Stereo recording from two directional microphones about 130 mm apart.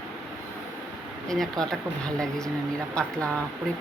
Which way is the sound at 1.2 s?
Centre (ahead or behind).